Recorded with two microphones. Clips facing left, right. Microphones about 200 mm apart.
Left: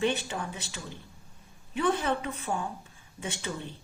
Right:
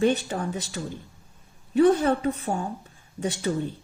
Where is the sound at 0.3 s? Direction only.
40° right (ahead or behind).